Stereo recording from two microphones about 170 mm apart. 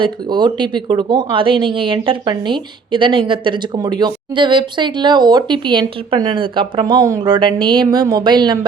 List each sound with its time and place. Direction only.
0.0 s speech: 25° right (ahead or behind)